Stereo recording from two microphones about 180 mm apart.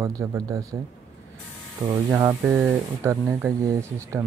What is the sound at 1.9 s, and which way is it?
Speech, 15° right (ahead or behind).